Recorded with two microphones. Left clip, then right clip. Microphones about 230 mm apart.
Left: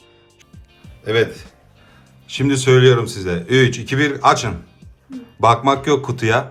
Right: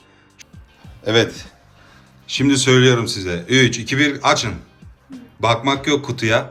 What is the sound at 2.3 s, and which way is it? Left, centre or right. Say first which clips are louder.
Speech: even; centre.